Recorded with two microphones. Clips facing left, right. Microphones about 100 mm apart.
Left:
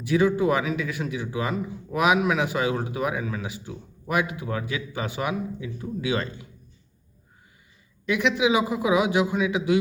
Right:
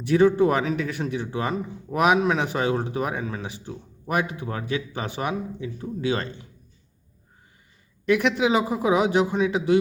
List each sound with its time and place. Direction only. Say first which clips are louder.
0.3 s speech: right 2 dB; 40° right (ahead or behind)
8.0 s speech: right 2 dB; 50° right (ahead or behind)